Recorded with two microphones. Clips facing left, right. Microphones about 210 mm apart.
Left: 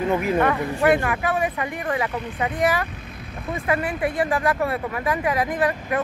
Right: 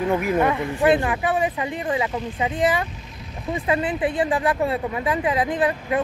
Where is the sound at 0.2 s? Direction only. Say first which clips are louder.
Even; 15° right (ahead or behind).